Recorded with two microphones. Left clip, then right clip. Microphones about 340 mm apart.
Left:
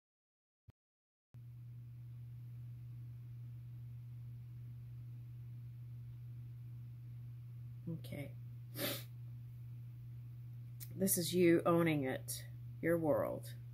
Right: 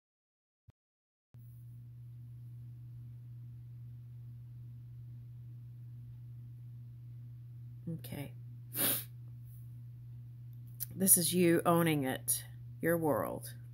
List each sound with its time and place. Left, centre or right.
8.0 s speech: centre
8.7 s sneeze: right
10.8 s speech: centre